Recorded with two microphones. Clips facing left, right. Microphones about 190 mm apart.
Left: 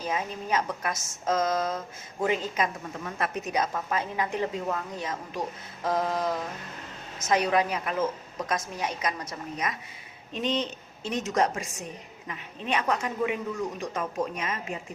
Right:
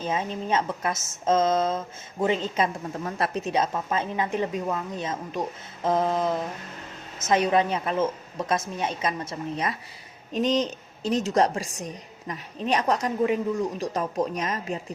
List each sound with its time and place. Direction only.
0.0 s a woman's voice: 25° right (ahead or behind)
10.3 s a woman's voice: 40° right (ahead or behind)